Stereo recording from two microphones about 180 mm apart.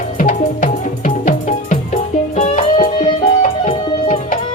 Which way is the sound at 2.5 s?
40° left (ahead or behind).